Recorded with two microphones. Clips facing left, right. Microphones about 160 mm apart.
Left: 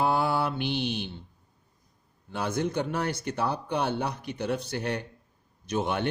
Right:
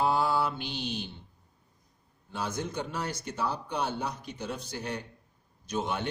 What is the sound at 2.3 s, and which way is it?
Speech, 60° left (ahead or behind).